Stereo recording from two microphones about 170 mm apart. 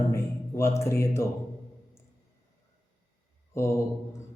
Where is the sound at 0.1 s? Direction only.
15° left (ahead or behind).